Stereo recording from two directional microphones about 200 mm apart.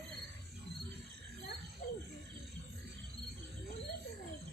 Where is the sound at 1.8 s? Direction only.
45° left (ahead or behind).